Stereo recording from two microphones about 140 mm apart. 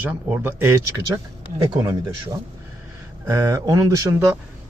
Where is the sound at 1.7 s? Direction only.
30° right (ahead or behind).